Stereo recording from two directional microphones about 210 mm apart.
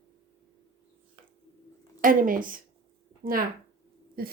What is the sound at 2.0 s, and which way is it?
Speech, 40° right (ahead or behind).